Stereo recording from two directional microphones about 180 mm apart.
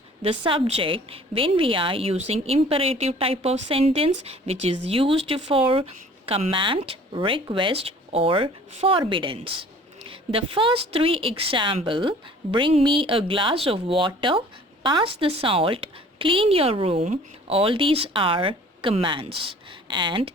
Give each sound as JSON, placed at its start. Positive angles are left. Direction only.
{"t": 0.2, "sound": "a woman's voice", "side_deg": -30}